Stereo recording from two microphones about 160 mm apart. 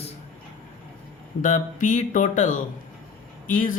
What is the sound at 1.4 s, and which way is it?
Speech, 55° left (ahead or behind).